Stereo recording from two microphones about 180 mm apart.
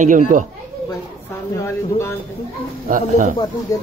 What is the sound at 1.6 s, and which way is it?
Speech, 15° left (ahead or behind).